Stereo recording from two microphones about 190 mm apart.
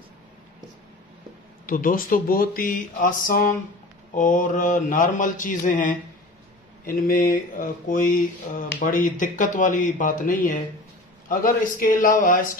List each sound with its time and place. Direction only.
1.7 s speech: 45° left (ahead or behind)